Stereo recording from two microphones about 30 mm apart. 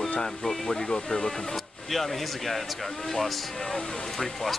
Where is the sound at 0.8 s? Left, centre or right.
Left.